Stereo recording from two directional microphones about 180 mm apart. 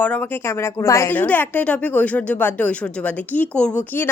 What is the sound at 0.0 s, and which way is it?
Speech, 10° left (ahead or behind).